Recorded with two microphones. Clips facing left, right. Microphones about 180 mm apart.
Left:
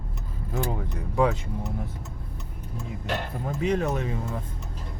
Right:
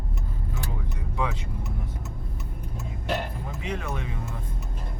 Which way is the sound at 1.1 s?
45° left (ahead or behind).